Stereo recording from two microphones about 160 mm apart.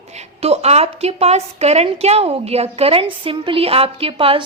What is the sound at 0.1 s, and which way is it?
A woman's voice, 40° right (ahead or behind).